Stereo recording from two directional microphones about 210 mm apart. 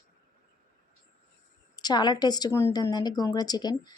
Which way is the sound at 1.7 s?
20° left (ahead or behind).